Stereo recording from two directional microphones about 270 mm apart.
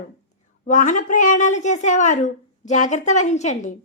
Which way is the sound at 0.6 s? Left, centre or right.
Left.